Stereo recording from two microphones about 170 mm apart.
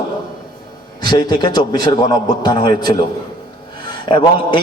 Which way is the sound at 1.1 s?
25° left (ahead or behind).